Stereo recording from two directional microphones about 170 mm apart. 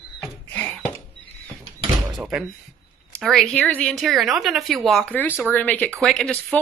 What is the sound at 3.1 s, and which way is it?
A woman's voice, centre (ahead or behind).